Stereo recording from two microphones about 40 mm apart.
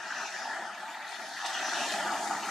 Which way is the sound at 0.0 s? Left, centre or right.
Centre.